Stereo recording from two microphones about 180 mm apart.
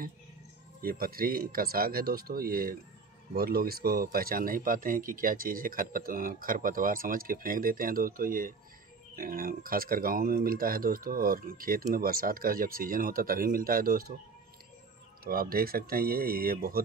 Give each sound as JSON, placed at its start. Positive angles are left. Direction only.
{"t": 0.8, "sound": "speech", "side_deg": -55}
{"t": 15.2, "sound": "speech", "side_deg": -55}